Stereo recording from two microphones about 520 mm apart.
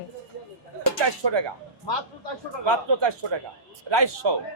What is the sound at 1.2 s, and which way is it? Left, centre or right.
Speech, right.